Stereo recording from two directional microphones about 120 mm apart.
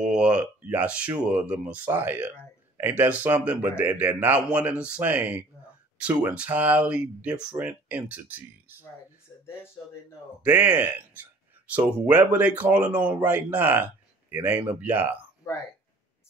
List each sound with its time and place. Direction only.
0.0 s speech: 5° right (ahead or behind)
10.4 s speech: 15° right (ahead or behind)